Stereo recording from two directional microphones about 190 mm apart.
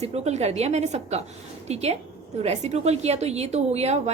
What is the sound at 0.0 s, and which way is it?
A woman's voice, 35° right (ahead or behind).